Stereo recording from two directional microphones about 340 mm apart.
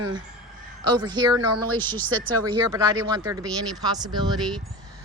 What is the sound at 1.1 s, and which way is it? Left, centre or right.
Speech, centre.